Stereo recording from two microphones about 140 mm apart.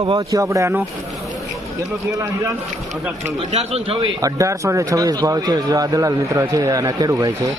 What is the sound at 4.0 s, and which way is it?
Speech, 25° right (ahead or behind).